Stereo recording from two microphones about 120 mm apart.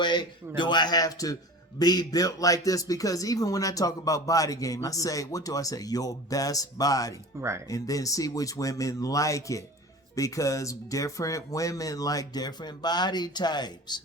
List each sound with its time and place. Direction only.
0.0 s speech: 40° left (ahead or behind)